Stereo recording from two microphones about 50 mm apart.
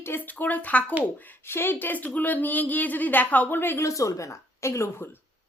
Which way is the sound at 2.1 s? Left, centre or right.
Left.